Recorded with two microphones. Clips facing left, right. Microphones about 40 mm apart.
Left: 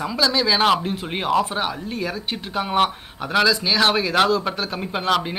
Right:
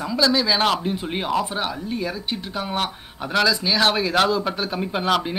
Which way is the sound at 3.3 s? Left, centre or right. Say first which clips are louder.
Left 1 dB; centre.